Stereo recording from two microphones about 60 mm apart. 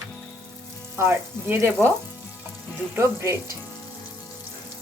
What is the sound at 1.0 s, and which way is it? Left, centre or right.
Speech, right.